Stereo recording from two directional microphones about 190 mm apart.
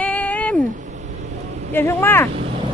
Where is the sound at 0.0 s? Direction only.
10° left (ahead or behind).